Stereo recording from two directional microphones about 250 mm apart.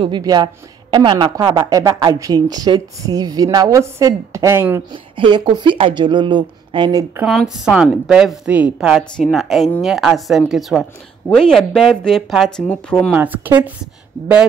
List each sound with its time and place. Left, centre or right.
0.0 s speech: centre
7.2 s a woman's voice: centre